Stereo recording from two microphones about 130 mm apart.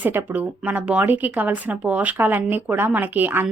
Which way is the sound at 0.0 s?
15° right (ahead or behind).